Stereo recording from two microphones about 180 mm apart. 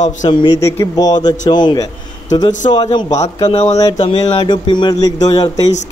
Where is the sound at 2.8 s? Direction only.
35° left (ahead or behind).